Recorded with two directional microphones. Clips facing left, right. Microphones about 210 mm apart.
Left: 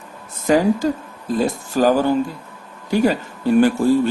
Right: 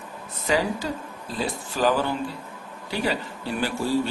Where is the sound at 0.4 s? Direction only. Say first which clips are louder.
Left 9 dB; 45° left (ahead or behind).